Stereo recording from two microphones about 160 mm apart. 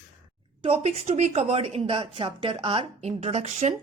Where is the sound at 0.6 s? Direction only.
35° right (ahead or behind).